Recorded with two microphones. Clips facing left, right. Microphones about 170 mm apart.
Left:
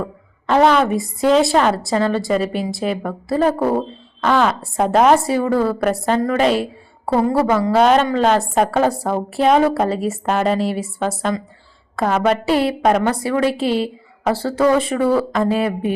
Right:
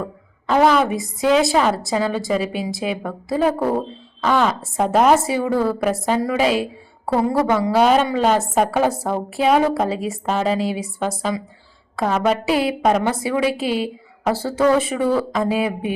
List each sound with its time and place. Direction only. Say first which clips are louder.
0.0 s a sound: left 2 dB; 5° right (ahead or behind)
1.3 s a woman's voice: left 2 dB; centre (ahead or behind)
13.7 s a woman's voice: left 3 dB; 30° left (ahead or behind)
14.7 s a woman's voice: left 2 dB; 5° right (ahead or behind)